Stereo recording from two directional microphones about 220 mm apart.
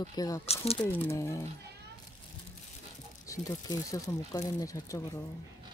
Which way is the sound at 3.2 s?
15° left (ahead or behind).